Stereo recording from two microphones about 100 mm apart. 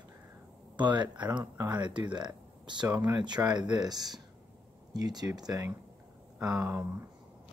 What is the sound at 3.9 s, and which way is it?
Speech, 40° right (ahead or behind).